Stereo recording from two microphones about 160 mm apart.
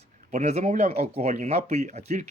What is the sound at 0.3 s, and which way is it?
Speech, 45° right (ahead or behind).